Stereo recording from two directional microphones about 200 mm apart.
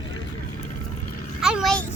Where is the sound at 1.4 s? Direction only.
5° right (ahead or behind).